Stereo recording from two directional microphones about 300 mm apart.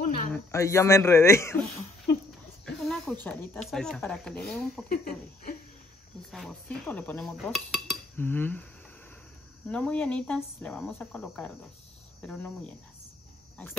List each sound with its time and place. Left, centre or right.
0.3 s speech: centre
2.6 s snake: centre
3.3 s speech: centre
4.8 s speech: left
6.3 s speech: centre
9.7 s speech: centre